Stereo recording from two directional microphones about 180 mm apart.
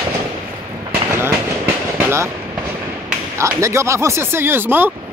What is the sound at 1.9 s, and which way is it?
Train, 15° right (ahead or behind).